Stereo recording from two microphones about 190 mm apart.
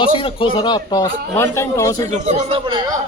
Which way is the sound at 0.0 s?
25° left (ahead or behind).